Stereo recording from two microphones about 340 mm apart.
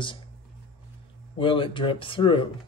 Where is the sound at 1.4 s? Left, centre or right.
Centre.